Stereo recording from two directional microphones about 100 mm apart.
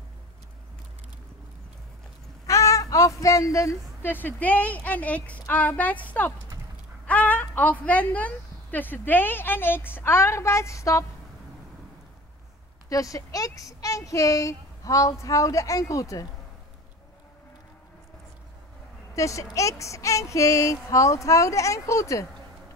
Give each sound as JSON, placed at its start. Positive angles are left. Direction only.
{"t": 2.4, "sound": "a sound", "side_deg": 30}
{"t": 4.0, "sound": "a woman's voice", "side_deg": 20}
{"t": 7.1, "sound": "a sound", "side_deg": 15}
{"t": 8.7, "sound": "a woman's voice", "side_deg": 20}
{"t": 12.9, "sound": "speech", "side_deg": 35}
{"t": 19.1, "sound": "a woman's voice", "side_deg": 30}